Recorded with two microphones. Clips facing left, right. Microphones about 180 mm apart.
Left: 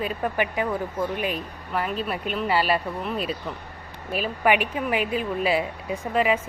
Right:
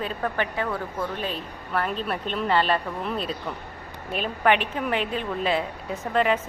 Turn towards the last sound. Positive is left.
turn(degrees=5)  # may be behind; listen again after turning